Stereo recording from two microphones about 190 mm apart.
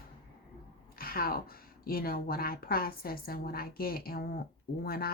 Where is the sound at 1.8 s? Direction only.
50° left (ahead or behind).